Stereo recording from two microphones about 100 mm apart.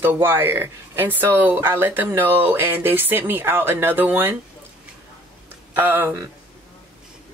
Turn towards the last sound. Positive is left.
turn(degrees=-20)  # may be behind; listen again after turning